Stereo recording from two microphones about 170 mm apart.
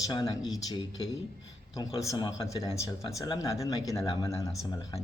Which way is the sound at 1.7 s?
20° left (ahead or behind).